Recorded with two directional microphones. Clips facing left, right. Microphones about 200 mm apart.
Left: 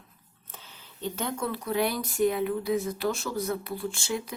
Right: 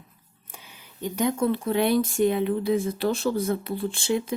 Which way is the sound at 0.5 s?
15° right (ahead or behind).